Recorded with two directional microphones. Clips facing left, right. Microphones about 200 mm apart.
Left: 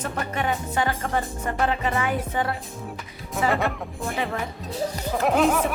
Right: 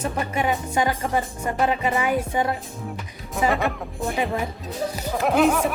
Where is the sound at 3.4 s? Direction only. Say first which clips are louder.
Right 2 dB; centre (ahead or behind).